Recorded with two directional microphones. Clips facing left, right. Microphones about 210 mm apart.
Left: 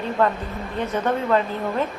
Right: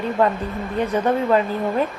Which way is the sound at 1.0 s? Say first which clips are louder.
Right 2 dB; 10° right (ahead or behind).